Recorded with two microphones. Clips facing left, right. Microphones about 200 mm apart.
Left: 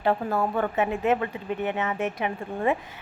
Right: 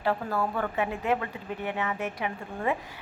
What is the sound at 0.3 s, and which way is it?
Speech, 25° left (ahead or behind).